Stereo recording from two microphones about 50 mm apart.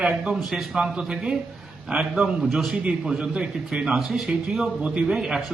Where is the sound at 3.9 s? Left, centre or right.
Centre.